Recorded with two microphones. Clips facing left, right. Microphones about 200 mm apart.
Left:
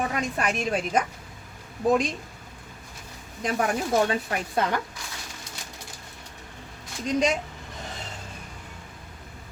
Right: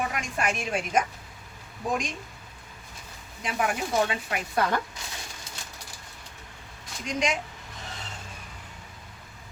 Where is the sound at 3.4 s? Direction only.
40° left (ahead or behind).